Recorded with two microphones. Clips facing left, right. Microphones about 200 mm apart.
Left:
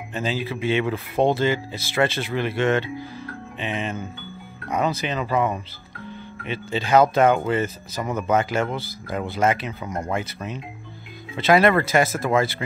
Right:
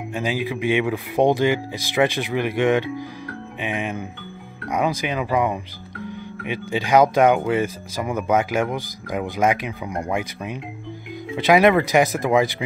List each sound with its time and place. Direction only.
0.1 s speech: 15° right (ahead or behind)